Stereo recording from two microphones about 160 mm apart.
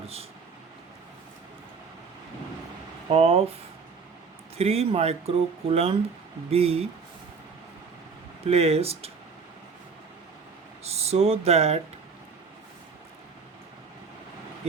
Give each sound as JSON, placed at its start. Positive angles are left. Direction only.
{"t": 0.0, "sound": "speech", "side_deg": -40}
{"t": 3.1, "sound": "speech", "side_deg": -40}
{"t": 4.5, "sound": "speech", "side_deg": -40}
{"t": 8.4, "sound": "speech", "side_deg": -40}
{"t": 10.8, "sound": "speech", "side_deg": -40}